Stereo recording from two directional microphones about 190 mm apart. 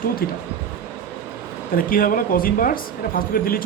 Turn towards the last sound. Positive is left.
turn(degrees=50)  # may be behind; listen again after turning